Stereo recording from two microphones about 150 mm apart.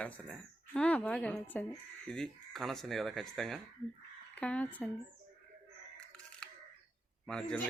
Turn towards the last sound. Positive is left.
turn(degrees=5)  # may be behind; listen again after turning